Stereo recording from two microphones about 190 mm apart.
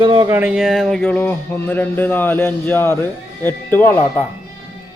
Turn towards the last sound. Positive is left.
turn(degrees=10)  # may be behind; listen again after turning